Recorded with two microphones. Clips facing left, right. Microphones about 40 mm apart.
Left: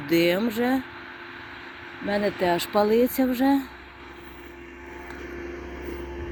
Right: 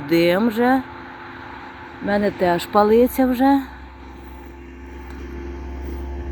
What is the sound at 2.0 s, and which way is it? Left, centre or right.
Speech, centre.